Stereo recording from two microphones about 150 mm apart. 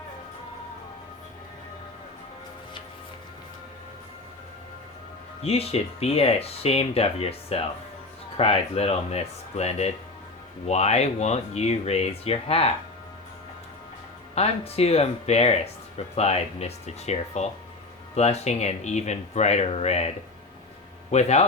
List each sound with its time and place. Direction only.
5.4 s speech: 45° left (ahead or behind)
14.3 s speech: 45° left (ahead or behind)
21.1 s speech: 45° left (ahead or behind)